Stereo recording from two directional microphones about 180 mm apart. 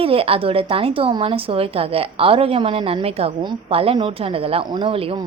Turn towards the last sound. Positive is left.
turn(degrees=-30)  # may be behind; listen again after turning